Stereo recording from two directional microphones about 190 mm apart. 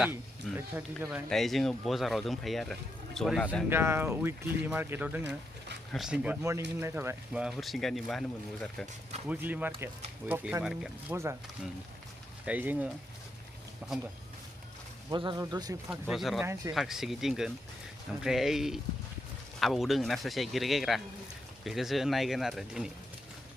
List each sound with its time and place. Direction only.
0.0 s speech: 5° right (ahead or behind)
3.7 s speech: 10° right (ahead or behind)
9.3 s speech: 10° right (ahead or behind)
11.1 s speech: 15° right (ahead or behind)
12.5 s speech: 10° right (ahead or behind)
15.1 s speech: 25° right (ahead or behind)
15.9 s speech: 5° right (ahead or behind)